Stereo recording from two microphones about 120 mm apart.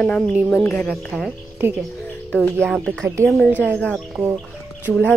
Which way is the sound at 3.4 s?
15° left (ahead or behind).